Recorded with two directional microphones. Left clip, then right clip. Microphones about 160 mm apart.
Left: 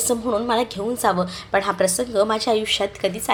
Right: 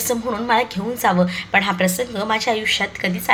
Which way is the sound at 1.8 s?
50° left (ahead or behind).